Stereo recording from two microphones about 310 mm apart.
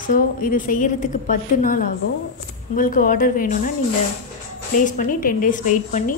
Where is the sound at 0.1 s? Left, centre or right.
Left.